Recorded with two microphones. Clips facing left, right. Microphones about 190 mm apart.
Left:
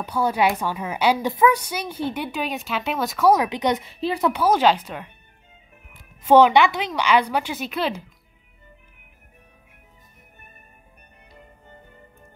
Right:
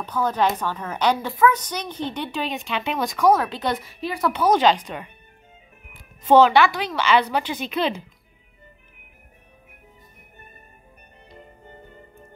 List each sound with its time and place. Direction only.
0.0 s a woman's voice: 10° left (ahead or behind)
3.3 s speech: 15° left (ahead or behind)
4.3 s a woman's voice: 10° left (ahead or behind)
6.2 s a woman's voice: 15° left (ahead or behind)